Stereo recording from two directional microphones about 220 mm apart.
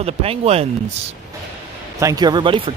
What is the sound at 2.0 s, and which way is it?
Speech, 15° right (ahead or behind).